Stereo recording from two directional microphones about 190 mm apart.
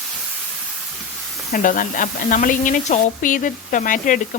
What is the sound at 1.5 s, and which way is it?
Speech, 45° left (ahead or behind).